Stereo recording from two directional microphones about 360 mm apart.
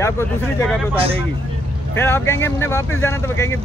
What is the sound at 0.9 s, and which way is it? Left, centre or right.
Speech, centre.